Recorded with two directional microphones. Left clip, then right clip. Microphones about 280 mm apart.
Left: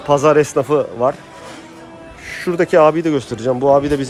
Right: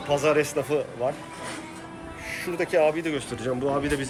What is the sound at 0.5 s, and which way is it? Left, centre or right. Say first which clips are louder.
Speech: left 10 dB; left.